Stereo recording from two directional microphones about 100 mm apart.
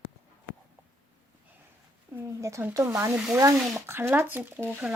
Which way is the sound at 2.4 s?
30° right (ahead or behind).